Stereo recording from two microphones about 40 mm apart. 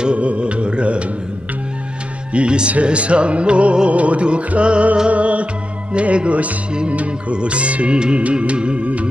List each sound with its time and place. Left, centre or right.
0.0 s music: right
2.3 s speech: right
2.7 s music: right